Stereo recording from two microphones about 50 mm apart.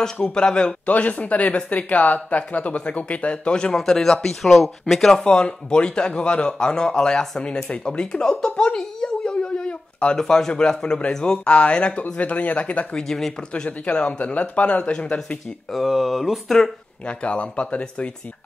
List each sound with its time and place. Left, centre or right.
0.0 s a man's voice: centre
0.8 s a man's voice: left; by 5.0 s centre
5.2 s a man's voice: centre
7.7 s a sound: centre
10.1 s a man's voice: centre
11.5 s speech: left
13.0 s a man's voice: centre
13.5 s speech: left
15.7 s speech: centre
17.0 s speech: left